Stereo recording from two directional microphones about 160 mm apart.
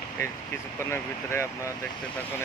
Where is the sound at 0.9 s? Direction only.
15° left (ahead or behind).